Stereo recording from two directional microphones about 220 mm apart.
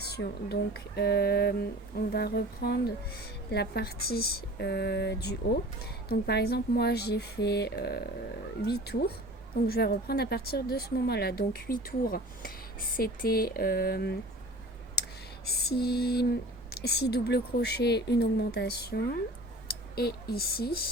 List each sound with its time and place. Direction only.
0.0 s speech: 50° left (ahead or behind)
15.4 s speech: 45° left (ahead or behind)